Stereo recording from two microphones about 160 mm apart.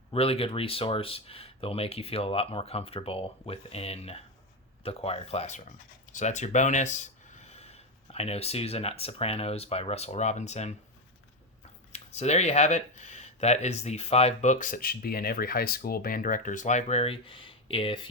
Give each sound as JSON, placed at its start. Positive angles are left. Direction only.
{"t": 0.1, "sound": "speech", "side_deg": 40}
{"t": 11.9, "sound": "speech", "side_deg": 45}